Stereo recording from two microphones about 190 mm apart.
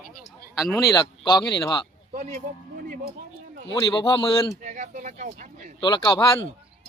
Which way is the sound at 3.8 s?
25° left (ahead or behind).